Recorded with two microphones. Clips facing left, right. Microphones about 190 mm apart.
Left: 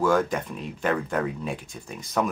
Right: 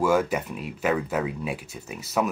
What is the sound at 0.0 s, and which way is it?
Speech, 10° right (ahead or behind).